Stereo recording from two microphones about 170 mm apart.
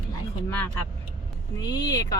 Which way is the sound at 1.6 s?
25° left (ahead or behind).